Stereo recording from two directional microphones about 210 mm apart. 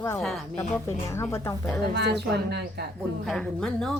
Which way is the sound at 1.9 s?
50° right (ahead or behind).